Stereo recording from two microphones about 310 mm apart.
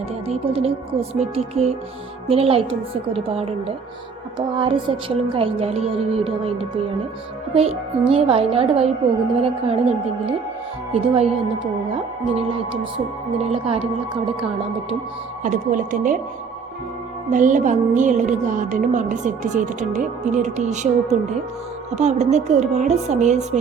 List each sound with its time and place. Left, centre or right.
0.3 s music: centre
2.2 s speech: centre
7.5 s music: centre
10.9 s speech: centre
15.4 s music: right
17.2 s music: right